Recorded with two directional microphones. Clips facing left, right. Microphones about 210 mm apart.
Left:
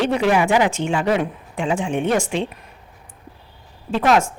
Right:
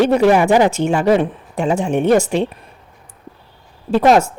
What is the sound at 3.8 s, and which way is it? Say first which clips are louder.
Speech: right 5 dB; 40° right (ahead or behind).